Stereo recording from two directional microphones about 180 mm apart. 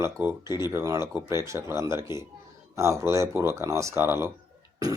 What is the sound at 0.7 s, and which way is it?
Speech, 15° right (ahead or behind).